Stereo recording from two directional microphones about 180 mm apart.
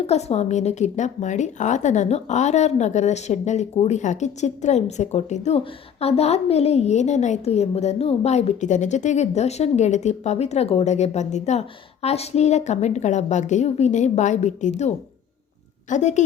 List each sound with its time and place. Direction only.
0.0 s a woman's voice: 35° left (ahead or behind)